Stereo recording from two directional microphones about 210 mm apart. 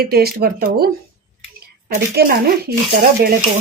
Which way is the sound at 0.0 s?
45° right (ahead or behind).